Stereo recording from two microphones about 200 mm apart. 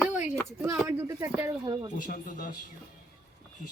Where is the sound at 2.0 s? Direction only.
40° left (ahead or behind).